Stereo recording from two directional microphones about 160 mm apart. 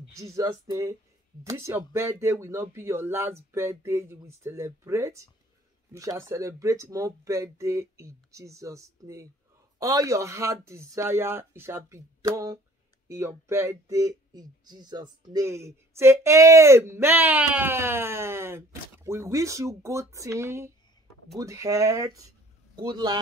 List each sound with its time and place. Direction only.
0.1 s speech: 20° right (ahead or behind)